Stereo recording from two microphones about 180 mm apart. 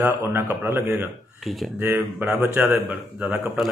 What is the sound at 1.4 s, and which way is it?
Speech, centre (ahead or behind).